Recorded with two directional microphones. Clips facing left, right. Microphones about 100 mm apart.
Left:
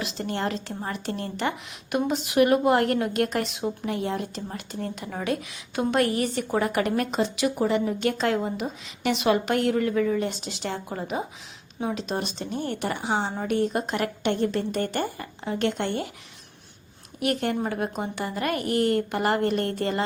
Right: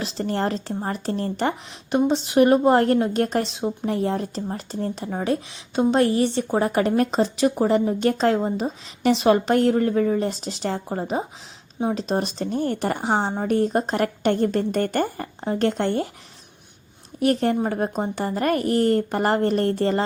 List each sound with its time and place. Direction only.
0.0 s speech: 35° right (ahead or behind)
17.2 s speech: 35° right (ahead or behind)